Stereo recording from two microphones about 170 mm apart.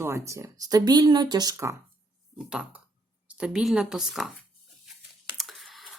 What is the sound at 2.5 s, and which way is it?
Speech, 5° right (ahead or behind).